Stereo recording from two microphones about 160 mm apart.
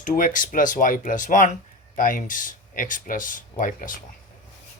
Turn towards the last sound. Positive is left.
turn(degrees=60)  # may be behind; listen again after turning